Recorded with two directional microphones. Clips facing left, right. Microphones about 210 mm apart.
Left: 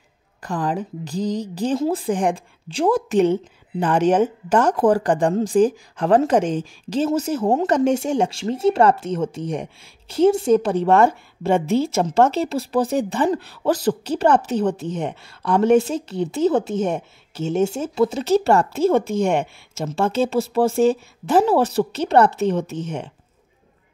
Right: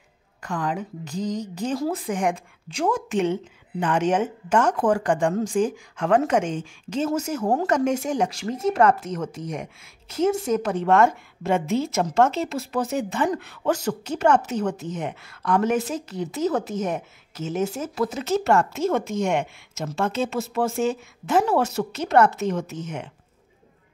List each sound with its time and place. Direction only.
0.4 s speech: 35° left (ahead or behind)